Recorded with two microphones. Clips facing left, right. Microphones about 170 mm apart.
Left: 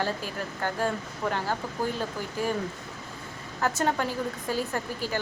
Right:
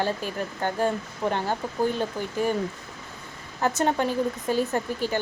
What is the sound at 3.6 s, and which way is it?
Speech, 20° right (ahead or behind).